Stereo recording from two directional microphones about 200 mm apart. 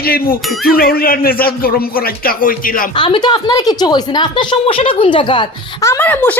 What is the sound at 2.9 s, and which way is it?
Speech, 25° left (ahead or behind).